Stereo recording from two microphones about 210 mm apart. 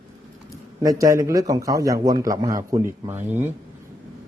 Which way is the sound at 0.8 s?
15° right (ahead or behind).